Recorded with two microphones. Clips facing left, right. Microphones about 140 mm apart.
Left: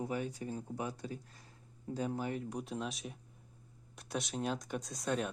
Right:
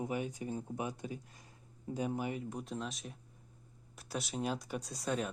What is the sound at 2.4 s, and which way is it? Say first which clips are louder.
Speech: left 1 dB; centre (ahead or behind).